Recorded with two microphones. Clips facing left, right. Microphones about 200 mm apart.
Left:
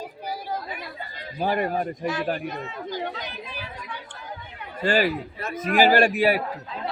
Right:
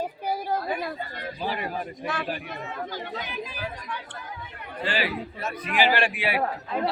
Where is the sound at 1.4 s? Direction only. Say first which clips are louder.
Left 7 dB; 50° left (ahead or behind).